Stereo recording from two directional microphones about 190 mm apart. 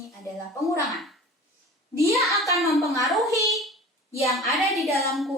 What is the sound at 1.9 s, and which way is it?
Speech, 15° right (ahead or behind).